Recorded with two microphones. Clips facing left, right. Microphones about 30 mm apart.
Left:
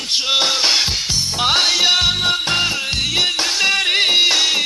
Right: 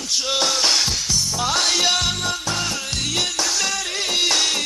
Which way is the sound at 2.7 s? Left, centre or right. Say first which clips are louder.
Left 5 dB; left.